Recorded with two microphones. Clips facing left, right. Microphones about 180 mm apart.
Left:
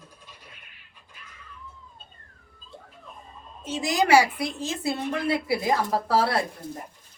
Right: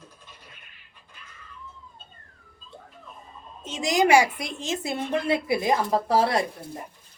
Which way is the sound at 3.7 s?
20° right (ahead or behind).